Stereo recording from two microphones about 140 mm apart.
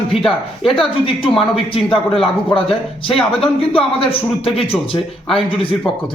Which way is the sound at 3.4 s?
40° left (ahead or behind).